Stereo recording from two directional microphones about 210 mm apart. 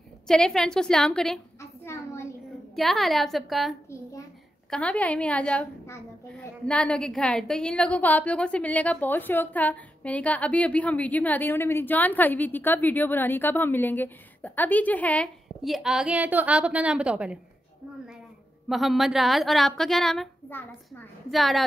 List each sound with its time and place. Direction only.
0.3 s a woman's voice: 5° left (ahead or behind)
1.6 s a sound: 10° left (ahead or behind)
2.7 s a woman's voice: centre (ahead or behind)
18.7 s a woman's voice: centre (ahead or behind)